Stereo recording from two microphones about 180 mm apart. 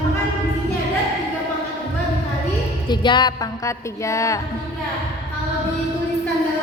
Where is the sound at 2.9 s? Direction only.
25° left (ahead or behind).